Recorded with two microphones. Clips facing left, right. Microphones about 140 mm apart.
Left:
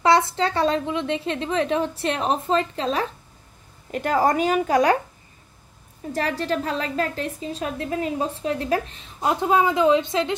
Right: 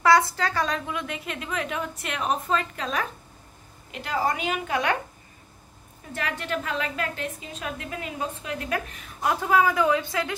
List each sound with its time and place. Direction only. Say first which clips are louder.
0.0 s a woman's voice: left 2 dB; 25° left (ahead or behind)
3.9 s a woman's voice: left 7 dB; 45° left (ahead or behind)
6.1 s a woman's voice: left 6 dB; 35° left (ahead or behind)